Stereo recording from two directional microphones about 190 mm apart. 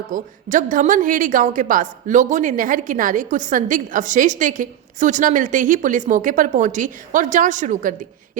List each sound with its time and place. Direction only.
0.1 s a woman's voice: 45° right (ahead or behind)